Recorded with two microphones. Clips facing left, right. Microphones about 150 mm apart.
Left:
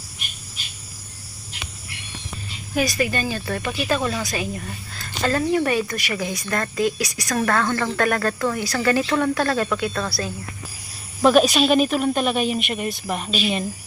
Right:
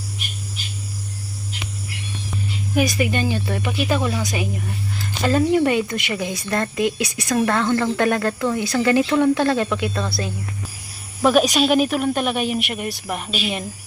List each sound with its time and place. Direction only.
2.7 s speech: 15° right (ahead or behind)
11.2 s speech: 10° right (ahead or behind)